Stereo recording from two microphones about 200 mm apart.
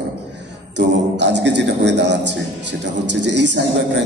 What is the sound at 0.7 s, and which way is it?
A man's voice, 60° right (ahead or behind).